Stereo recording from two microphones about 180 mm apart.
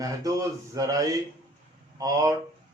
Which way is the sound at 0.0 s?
20° right (ahead or behind).